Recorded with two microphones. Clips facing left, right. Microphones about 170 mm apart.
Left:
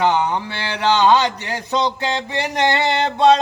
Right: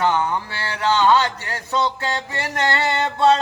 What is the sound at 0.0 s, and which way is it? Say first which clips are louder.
Mantra: left 2 dB; 20° left (ahead or behind).